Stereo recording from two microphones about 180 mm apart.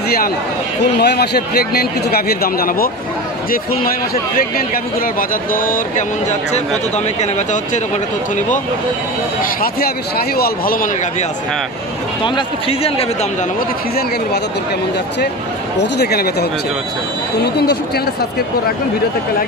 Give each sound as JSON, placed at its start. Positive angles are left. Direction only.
{"t": 0.9, "sound": "speech", "side_deg": 65}
{"t": 4.4, "sound": "a man's voice", "side_deg": 55}
{"t": 7.2, "sound": "speech", "side_deg": 40}
{"t": 9.4, "sound": "a man's voice", "side_deg": 55}
{"t": 12.2, "sound": "speech", "side_deg": 30}
{"t": 15.8, "sound": "speech", "side_deg": 65}